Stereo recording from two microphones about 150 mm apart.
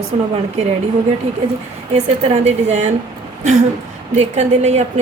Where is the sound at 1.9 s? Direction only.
45° right (ahead or behind).